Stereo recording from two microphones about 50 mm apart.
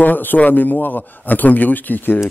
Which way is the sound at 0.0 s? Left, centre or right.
Left.